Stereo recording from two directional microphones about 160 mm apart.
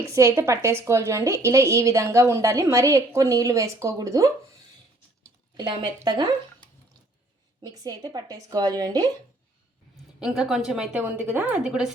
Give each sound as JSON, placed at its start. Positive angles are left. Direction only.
{"t": 0.1, "sound": "a woman's voice", "side_deg": -15}
{"t": 5.5, "sound": "a woman's voice", "side_deg": -30}
{"t": 7.6, "sound": "a woman's voice", "side_deg": -25}
{"t": 10.2, "sound": "a woman's voice", "side_deg": -5}